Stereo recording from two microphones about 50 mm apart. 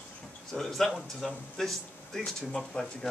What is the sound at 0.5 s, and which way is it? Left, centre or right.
Speech, centre.